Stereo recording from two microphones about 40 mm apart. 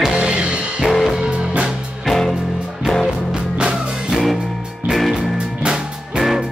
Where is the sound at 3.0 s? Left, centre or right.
Right.